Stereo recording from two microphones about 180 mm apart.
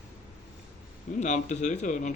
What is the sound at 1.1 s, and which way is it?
Speech, 40° left (ahead or behind).